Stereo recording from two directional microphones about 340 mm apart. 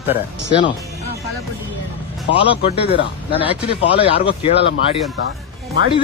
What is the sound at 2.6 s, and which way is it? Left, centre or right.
Speech, centre.